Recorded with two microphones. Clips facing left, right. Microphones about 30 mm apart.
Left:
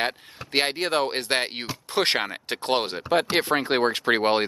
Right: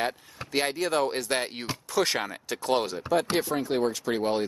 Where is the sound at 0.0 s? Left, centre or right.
Left.